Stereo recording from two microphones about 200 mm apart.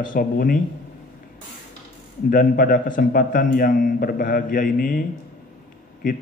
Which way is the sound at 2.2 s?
45° left (ahead or behind).